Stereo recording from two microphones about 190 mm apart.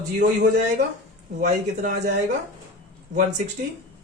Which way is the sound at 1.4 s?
45° right (ahead or behind).